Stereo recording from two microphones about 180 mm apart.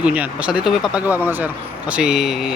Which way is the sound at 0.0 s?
5° right (ahead or behind).